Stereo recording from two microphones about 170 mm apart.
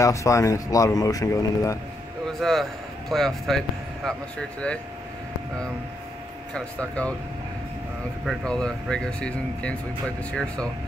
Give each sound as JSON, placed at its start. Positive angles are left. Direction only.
{"t": 0.0, "sound": "speech", "side_deg": 20}
{"t": 2.2, "sound": "speech", "side_deg": 0}
{"t": 6.5, "sound": "speech", "side_deg": 5}
{"t": 8.3, "sound": "speech", "side_deg": 5}